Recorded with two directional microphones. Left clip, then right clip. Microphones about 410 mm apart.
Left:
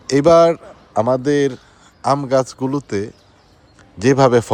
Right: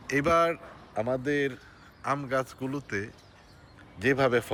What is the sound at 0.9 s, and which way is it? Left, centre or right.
Speech, left.